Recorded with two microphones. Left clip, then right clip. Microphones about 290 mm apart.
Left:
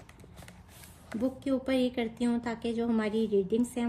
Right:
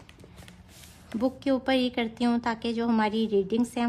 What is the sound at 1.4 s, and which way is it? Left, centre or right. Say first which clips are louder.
A woman's voice: right 4 dB; right.